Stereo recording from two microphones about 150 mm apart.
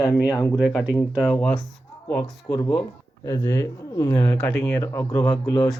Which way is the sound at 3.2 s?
20° left (ahead or behind).